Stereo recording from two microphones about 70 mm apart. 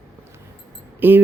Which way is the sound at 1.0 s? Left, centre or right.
Right.